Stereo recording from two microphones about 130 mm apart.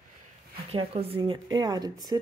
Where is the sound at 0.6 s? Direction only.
50° right (ahead or behind).